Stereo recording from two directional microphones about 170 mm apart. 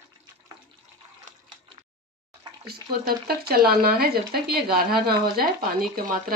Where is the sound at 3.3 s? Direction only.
65° right (ahead or behind).